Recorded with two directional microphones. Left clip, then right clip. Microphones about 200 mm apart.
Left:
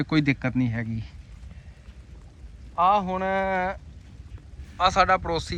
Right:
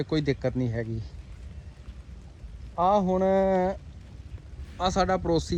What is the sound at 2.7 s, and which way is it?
Speech, 30° right (ahead or behind).